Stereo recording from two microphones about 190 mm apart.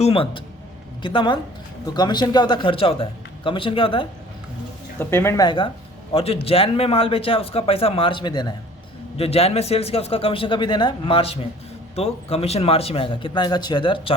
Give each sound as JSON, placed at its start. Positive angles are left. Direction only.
{"t": 0.0, "sound": "a man's voice", "side_deg": 30}
{"t": 4.9, "sound": "a man's voice", "side_deg": 15}